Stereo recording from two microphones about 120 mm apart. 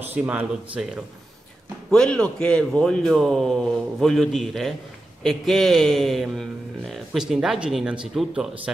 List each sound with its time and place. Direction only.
0.1 s speech: 15° right (ahead or behind)
1.9 s a man's voice: 5° left (ahead or behind)